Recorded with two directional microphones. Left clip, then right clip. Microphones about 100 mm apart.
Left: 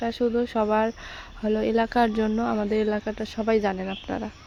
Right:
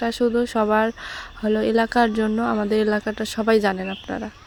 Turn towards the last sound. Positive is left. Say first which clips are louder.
# right 2 dB
turn(degrees=-5)  # may be behind; listen again after turning